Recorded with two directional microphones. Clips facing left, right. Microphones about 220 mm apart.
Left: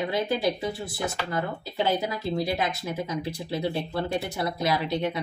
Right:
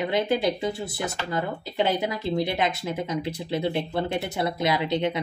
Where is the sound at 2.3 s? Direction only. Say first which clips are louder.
Right 2 dB; 25° right (ahead or behind).